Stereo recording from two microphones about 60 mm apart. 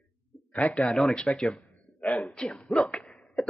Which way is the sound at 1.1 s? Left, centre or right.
Centre.